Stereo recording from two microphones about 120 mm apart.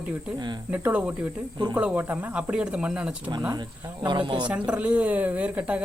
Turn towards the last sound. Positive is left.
turn(degrees=-10)  # may be behind; listen again after turning